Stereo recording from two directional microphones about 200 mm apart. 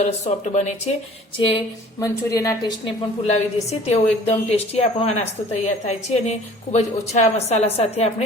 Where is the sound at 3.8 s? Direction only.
30° left (ahead or behind).